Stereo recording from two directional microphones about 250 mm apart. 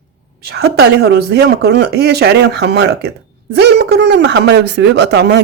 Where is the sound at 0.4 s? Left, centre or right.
Right.